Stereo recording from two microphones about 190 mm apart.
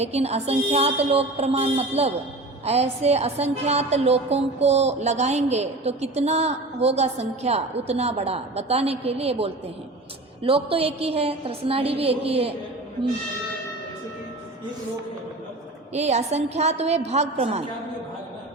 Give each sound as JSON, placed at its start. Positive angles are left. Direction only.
{"t": 0.0, "sound": "a woman's voice", "side_deg": -35}
{"t": 15.9, "sound": "a woman's voice", "side_deg": -35}